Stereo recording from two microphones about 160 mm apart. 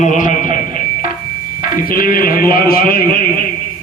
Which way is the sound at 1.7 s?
65° left (ahead or behind).